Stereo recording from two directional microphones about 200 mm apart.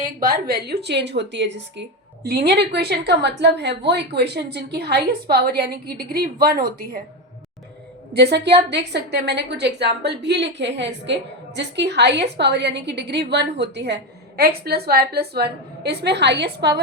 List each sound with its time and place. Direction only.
0.0 s a woman's voice: 45° right (ahead or behind)
8.1 s a woman's voice: 55° right (ahead or behind)